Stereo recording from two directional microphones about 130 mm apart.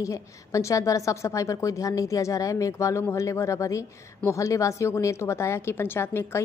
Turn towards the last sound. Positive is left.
turn(degrees=20)  # may be behind; listen again after turning